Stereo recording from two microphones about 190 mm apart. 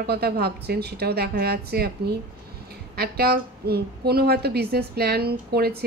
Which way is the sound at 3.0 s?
55° right (ahead or behind).